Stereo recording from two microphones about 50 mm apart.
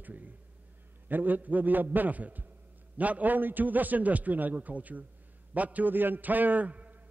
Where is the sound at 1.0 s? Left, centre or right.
Right.